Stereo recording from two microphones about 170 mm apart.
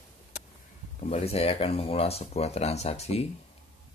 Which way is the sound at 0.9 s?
40° left (ahead or behind).